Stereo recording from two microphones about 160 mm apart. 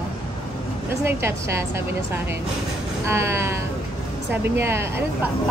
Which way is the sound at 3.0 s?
15° right (ahead or behind).